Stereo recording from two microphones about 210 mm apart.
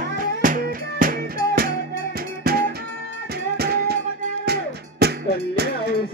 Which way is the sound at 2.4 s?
45° right (ahead or behind).